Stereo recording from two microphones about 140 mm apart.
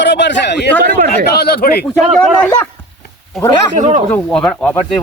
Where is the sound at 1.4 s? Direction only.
90° left.